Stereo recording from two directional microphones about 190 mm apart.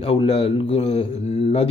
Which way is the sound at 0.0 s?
30° left (ahead or behind).